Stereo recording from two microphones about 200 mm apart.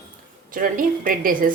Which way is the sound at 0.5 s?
45° right (ahead or behind).